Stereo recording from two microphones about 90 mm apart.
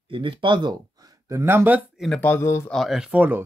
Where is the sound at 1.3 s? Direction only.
30° right (ahead or behind).